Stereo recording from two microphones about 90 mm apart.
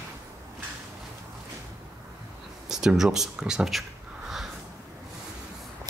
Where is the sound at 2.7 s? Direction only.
5° right (ahead or behind).